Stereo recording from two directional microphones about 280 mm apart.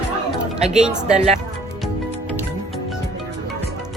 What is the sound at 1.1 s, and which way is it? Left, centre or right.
Speech, right.